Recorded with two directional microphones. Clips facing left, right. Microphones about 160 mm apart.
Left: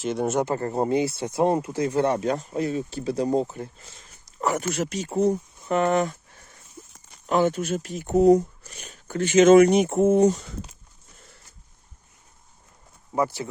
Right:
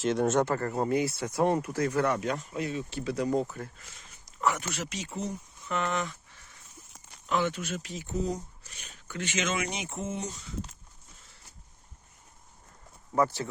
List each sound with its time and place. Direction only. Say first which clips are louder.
0.0 s speech: left 1 dB; 5° left (ahead or behind)
0.5 s speech: left 4 dB; 30° left (ahead or behind)
4.0 s speech: left 2 dB; 40° left (ahead or behind); by 8.4 s 65° left (ahead or behind)
8.6 s speech: left 7 dB; 45° left (ahead or behind)
13.1 s speech: left 2 dB; 10° left (ahead or behind)